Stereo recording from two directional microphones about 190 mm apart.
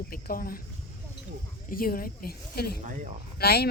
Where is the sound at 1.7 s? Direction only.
50° left (ahead or behind).